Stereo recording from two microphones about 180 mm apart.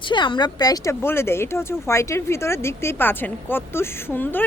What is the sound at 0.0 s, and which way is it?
Speech, 25° left (ahead or behind).